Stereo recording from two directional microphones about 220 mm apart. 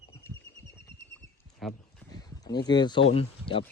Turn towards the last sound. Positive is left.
turn(degrees=25)  # may be behind; listen again after turning